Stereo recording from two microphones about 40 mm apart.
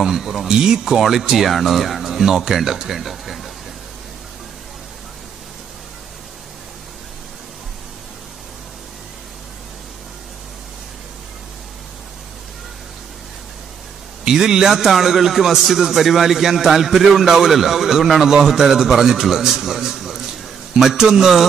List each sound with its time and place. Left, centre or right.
0.0 s speech: centre
14.2 s a man's voice: centre